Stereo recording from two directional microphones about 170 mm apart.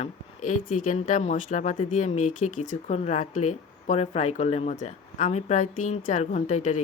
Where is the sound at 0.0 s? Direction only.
50° left (ahead or behind).